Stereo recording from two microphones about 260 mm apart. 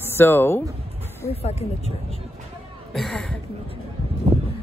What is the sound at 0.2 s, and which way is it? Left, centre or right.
Speech, centre.